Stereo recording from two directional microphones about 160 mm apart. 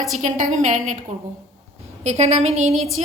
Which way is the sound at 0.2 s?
50° right (ahead or behind).